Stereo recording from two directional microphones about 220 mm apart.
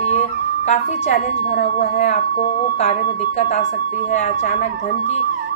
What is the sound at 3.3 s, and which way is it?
Speech, 30° left (ahead or behind).